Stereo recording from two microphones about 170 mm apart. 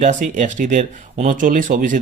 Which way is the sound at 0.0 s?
45° right (ahead or behind).